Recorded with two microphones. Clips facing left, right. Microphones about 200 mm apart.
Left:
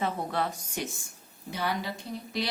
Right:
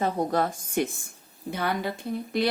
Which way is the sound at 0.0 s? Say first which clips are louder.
Right 5 dB; 45° right (ahead or behind).